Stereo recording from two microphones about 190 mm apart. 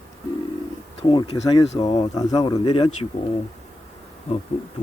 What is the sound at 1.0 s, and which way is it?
Speech, 25° left (ahead or behind).